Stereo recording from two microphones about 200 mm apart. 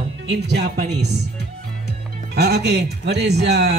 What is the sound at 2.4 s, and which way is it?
A man's voice, 55° right (ahead or behind).